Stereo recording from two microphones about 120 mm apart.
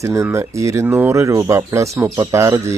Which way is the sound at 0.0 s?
25° right (ahead or behind).